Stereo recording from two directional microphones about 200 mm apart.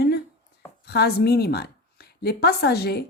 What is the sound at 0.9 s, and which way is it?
A woman's voice, 55° left (ahead or behind).